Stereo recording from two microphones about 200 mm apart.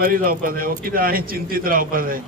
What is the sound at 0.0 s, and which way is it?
A man's voice, 45° right (ahead or behind).